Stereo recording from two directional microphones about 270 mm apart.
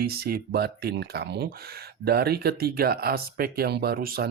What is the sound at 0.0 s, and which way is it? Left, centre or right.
Speech, right.